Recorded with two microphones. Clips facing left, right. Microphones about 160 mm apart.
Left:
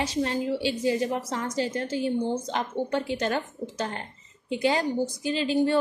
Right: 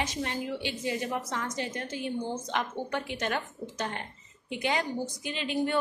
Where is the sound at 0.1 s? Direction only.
30° left (ahead or behind).